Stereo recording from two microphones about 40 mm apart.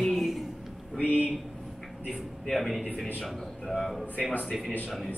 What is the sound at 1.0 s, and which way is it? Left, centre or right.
Speech, left.